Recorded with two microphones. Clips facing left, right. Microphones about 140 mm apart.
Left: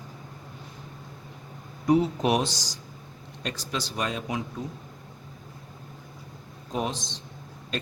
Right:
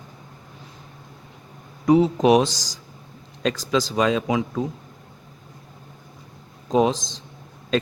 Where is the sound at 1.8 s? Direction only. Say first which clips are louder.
Right 6 dB; 90° right.